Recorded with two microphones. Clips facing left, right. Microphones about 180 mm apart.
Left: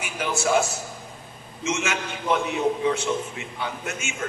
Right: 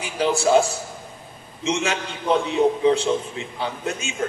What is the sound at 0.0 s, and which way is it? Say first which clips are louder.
A man's voice: right 5 dB; 30° right (ahead or behind).